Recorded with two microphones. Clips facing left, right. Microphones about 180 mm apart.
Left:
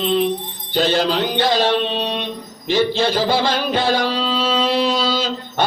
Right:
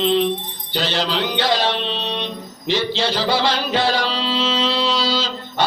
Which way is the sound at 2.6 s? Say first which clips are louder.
Left 4 dB; 50° left (ahead or behind).